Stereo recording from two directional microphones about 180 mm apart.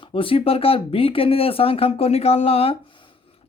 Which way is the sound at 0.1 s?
30° left (ahead or behind).